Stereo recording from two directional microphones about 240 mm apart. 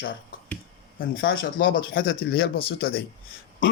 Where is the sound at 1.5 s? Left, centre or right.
Left.